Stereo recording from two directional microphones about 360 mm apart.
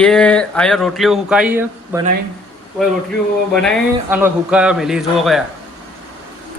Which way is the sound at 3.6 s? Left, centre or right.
Centre.